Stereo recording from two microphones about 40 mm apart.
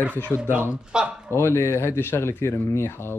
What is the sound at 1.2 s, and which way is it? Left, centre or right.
A man's voice, left.